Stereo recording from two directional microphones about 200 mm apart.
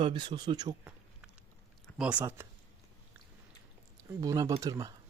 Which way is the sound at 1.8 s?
5° right (ahead or behind).